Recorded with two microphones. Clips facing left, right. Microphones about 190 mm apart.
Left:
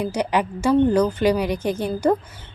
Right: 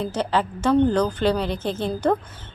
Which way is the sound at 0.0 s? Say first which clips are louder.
Left 1 dB; 10° left (ahead or behind).